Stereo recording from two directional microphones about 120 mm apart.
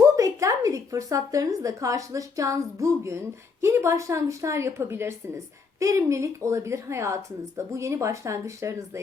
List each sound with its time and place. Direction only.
0.2 s a woman's voice: 30° right (ahead or behind)